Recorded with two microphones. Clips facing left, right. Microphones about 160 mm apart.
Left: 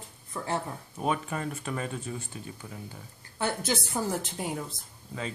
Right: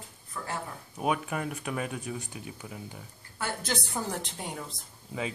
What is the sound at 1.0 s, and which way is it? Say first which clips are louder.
Speech: even; 5° right (ahead or behind).